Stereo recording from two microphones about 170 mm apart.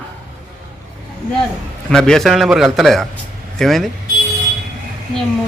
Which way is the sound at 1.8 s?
5° left (ahead or behind).